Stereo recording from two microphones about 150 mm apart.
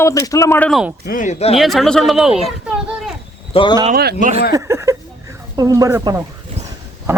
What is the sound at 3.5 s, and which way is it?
Speech, 35° left (ahead or behind).